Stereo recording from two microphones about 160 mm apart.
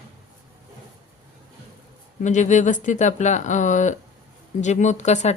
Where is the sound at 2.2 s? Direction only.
50° left (ahead or behind).